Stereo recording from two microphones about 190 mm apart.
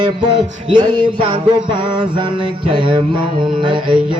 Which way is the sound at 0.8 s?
25° right (ahead or behind).